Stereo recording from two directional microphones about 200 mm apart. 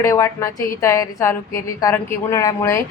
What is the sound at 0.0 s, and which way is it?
A woman's voice, 15° left (ahead or behind).